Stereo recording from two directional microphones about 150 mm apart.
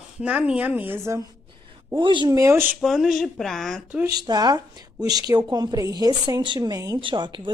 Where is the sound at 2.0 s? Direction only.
30° right (ahead or behind); by 2.7 s 15° right (ahead or behind).